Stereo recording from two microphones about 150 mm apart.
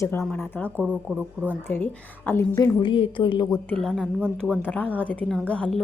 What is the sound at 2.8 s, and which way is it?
Speech, 35° left (ahead or behind).